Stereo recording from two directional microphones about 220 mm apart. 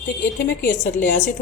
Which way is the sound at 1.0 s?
35° left (ahead or behind).